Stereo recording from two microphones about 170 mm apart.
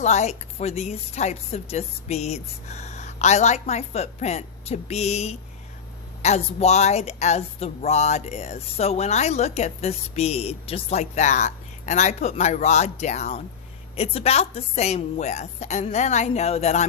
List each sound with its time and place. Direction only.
0.0 s speech: 40° left (ahead or behind)